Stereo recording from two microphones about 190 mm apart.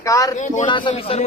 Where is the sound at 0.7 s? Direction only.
25° left (ahead or behind).